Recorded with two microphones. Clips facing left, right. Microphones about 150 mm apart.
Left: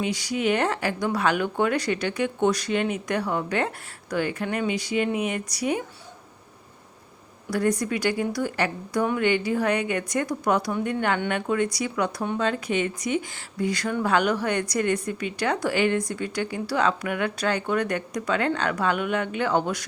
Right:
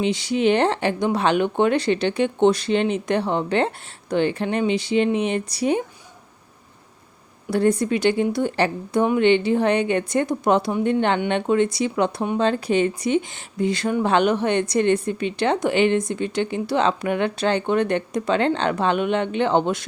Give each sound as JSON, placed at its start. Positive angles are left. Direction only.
{"t": 0.0, "sound": "speech", "side_deg": -25}
{"t": 7.5, "sound": "speech", "side_deg": -25}